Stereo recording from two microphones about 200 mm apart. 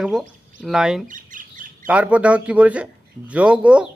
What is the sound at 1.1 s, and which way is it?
Bird, 40° right (ahead or behind).